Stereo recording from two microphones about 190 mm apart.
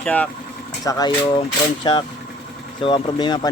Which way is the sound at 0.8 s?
20° left (ahead or behind).